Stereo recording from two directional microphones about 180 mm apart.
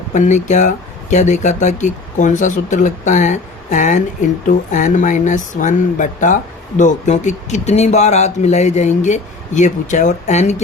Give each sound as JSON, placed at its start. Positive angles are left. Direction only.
{"t": 0.1, "sound": "speech", "side_deg": 40}